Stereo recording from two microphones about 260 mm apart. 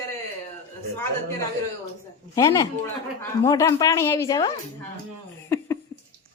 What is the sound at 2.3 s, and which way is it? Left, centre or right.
Speech, centre.